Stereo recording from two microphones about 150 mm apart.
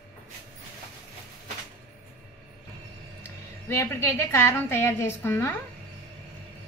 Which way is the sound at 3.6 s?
15° left (ahead or behind).